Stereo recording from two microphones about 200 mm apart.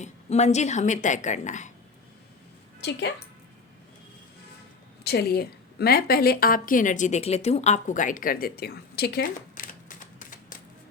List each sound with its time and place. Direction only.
0.0 s a woman's voice: 35° left (ahead or behind)
2.8 s speech: 55° left (ahead or behind)
5.0 s a woman's voice: 50° left (ahead or behind)